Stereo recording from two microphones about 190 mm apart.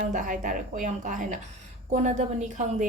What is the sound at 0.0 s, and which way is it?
A woman's voice, 45° right (ahead or behind).